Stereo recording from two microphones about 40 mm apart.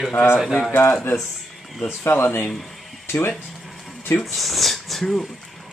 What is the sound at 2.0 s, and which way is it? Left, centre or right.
Speech, left.